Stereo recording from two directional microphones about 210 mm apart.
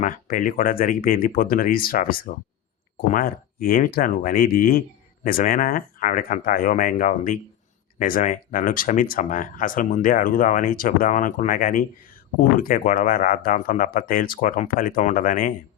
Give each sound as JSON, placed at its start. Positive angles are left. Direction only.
{"t": 0.0, "sound": "speech", "side_deg": 40}